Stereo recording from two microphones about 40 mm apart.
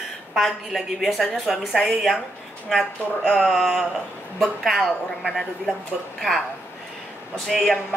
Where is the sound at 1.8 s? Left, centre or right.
Centre.